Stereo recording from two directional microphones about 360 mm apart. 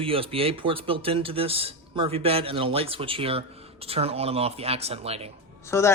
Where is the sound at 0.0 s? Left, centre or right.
Centre.